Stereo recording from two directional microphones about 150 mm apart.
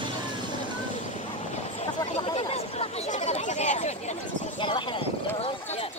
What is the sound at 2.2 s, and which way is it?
Chatter, 40° left (ahead or behind).